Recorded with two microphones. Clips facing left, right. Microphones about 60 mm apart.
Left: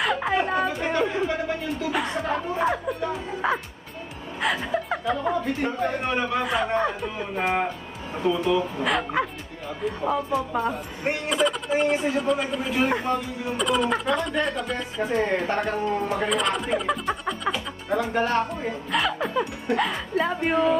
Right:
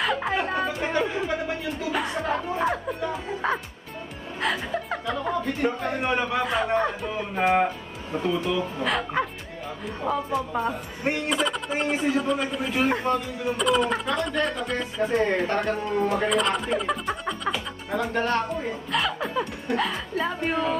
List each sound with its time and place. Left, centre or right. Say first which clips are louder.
0.0 s a sound: left 2 dB; centre
1.9 s music: even; centre
4.4 s speech: left 2 dB; centre